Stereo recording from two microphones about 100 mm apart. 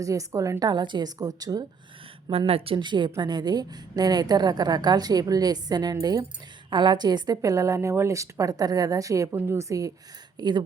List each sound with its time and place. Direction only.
0.0 s a woman's voice: 35° right (ahead or behind)
0.6 s a woman's voice: 45° right (ahead or behind)
2.5 s a woman's voice: 70° right (ahead or behind); by 6.2 s 40° right (ahead or behind)
6.7 s a woman's voice: 50° right (ahead or behind); by 9.9 s 30° right (ahead or behind)
10.4 s a woman's voice: 45° right (ahead or behind)